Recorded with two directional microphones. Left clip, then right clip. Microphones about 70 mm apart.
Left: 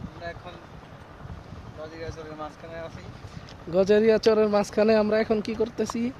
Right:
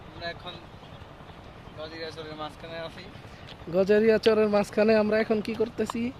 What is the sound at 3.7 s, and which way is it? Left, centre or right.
Speech, centre.